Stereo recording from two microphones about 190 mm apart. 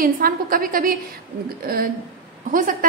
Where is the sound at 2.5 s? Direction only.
45° right (ahead or behind).